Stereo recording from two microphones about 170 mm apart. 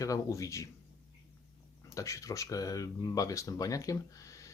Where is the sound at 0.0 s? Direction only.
20° left (ahead or behind).